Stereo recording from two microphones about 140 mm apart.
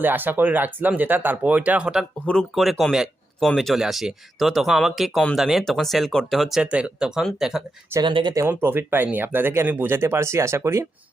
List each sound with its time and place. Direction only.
0.0 s speech: 15° right (ahead or behind)
8.0 s speech: 35° right (ahead or behind)
8.4 s speech: 15° right (ahead or behind)